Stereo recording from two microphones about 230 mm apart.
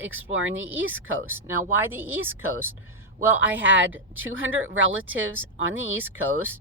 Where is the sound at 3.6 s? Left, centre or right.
Right.